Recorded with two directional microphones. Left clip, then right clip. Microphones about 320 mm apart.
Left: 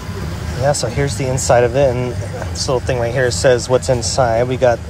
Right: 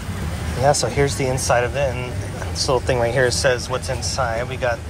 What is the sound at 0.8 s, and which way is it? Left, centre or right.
Speech, centre.